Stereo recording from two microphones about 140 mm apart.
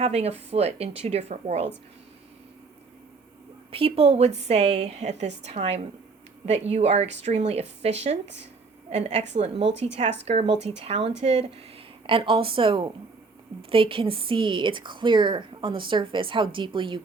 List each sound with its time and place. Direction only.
0.0 s a woman's voice: 50° right (ahead or behind)
3.7 s a woman's voice: 40° right (ahead or behind)
12.0 s a woman's voice: 40° right (ahead or behind)